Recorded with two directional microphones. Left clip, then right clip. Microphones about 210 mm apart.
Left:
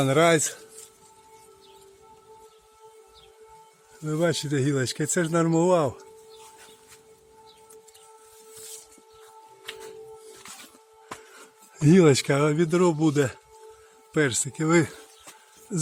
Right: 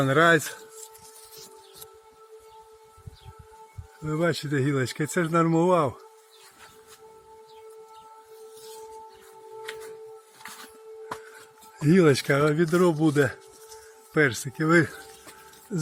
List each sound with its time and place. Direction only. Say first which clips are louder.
0.0 s speech: even; 20° left (ahead or behind)
4.0 s speech: left 1 dB; 15° left (ahead or behind)
11.8 s speech: left 2 dB; 25° left (ahead or behind)